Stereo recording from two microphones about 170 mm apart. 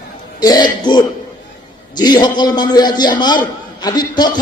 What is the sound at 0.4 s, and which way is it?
A man's voice, 25° left (ahead or behind).